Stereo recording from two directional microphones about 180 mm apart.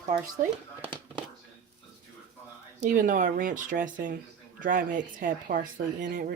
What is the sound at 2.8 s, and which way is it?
Speech, 45° right (ahead or behind).